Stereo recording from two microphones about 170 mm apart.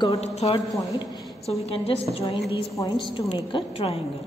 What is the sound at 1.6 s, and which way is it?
A woman's voice, 35° left (ahead or behind).